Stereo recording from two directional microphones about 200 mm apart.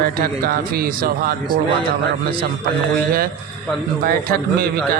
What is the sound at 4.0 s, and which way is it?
Speech, 45° right (ahead or behind).